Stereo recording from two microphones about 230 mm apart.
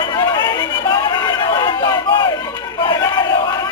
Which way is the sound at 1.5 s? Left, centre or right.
Centre.